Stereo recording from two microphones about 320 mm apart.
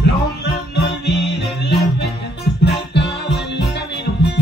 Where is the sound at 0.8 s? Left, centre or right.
Left.